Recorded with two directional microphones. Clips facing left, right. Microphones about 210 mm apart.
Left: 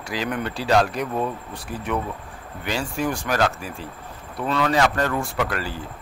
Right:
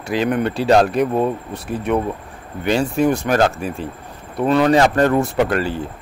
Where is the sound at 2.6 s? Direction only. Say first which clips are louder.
Right 9 dB; 25° right (ahead or behind).